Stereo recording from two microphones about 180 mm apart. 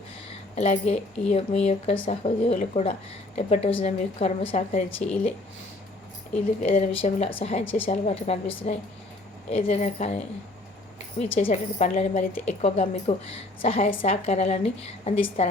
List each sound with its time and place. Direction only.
0.5 s a woman's voice: 40° left (ahead or behind)
6.6 s a woman's voice: 35° left (ahead or behind)
11.2 s a woman's voice: 40° left (ahead or behind)